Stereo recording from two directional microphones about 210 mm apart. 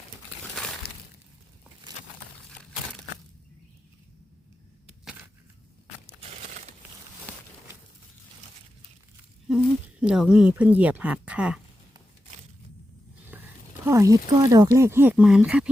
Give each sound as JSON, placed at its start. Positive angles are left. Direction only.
{"t": 0.8, "sound": "breaking", "side_deg": 50}
{"t": 9.5, "sound": "speech", "side_deg": -5}
{"t": 13.3, "sound": "speech", "side_deg": -10}